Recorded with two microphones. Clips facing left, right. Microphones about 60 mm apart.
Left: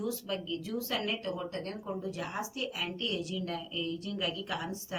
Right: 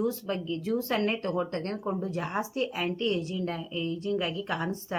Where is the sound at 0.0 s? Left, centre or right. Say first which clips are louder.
Right 5 dB; right.